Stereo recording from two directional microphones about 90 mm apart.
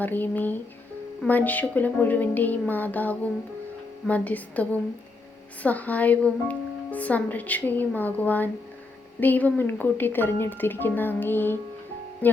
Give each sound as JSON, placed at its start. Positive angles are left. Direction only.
{"t": 0.0, "sound": "speech", "side_deg": 20}
{"t": 12.2, "sound": "music", "side_deg": 20}